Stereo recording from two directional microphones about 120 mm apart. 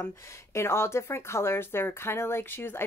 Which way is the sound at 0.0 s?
25° left (ahead or behind).